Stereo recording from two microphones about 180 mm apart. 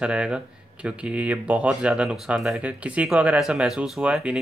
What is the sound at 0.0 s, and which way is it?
Speech, 5° right (ahead or behind).